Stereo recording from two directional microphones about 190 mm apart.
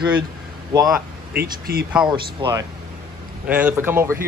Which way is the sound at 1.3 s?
50° right (ahead or behind).